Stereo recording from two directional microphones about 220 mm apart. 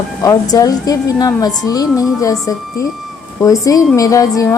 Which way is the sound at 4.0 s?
15° left (ahead or behind).